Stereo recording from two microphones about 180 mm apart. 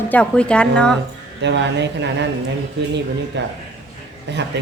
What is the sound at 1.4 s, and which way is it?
Speech, 75° right (ahead or behind).